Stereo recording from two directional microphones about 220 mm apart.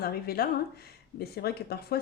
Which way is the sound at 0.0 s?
45° left (ahead or behind).